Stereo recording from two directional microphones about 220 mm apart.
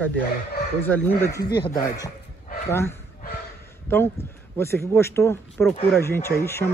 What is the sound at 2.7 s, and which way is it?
Speech, 10° left (ahead or behind).